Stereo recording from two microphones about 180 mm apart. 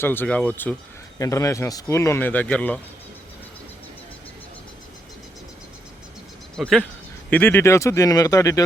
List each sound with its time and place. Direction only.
0.0 s speech: 10° left (ahead or behind)
6.6 s speech: 5° left (ahead or behind); by 8.6 s 20° left (ahead or behind)